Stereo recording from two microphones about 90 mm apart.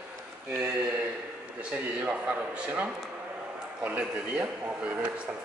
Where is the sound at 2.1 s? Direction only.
15° right (ahead or behind).